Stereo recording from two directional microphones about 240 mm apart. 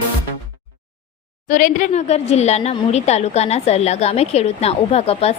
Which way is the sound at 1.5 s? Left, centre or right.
Left.